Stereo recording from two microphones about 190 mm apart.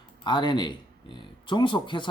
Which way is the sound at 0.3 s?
25° left (ahead or behind).